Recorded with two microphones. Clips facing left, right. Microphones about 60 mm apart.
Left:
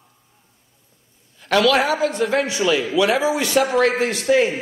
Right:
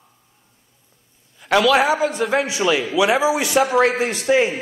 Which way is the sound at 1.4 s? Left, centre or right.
Centre.